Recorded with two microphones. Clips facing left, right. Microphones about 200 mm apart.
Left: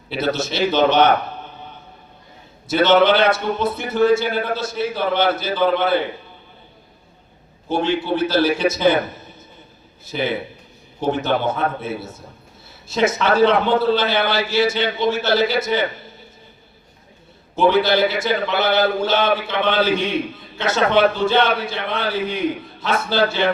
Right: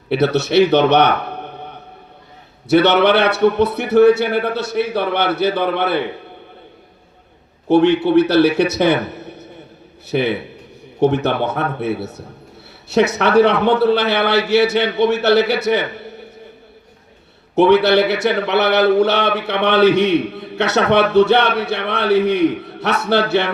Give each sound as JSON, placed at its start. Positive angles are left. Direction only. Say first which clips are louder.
{"t": 0.1, "sound": "a man's voice", "louder": "right 7 dB", "side_deg": -65}
{"t": 7.7, "sound": "a man's voice", "louder": "right 8 dB", "side_deg": -65}
{"t": 17.5, "sound": "a man's voice", "louder": "right 5 dB", "side_deg": -70}